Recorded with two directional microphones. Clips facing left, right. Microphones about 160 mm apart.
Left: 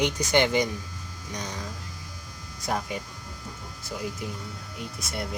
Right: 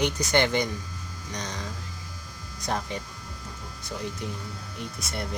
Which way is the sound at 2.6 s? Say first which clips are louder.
Left 1 dB; 10° left (ahead or behind).